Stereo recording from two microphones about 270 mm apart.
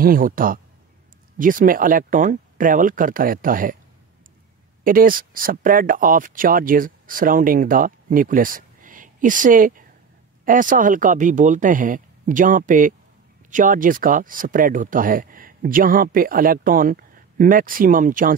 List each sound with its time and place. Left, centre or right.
0.0 s speech: right
4.8 s speech: right